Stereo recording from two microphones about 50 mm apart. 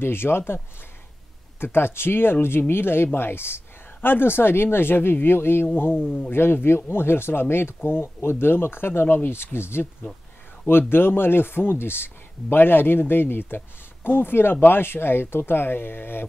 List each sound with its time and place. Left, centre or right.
0.0 s speech: left
1.6 s speech: left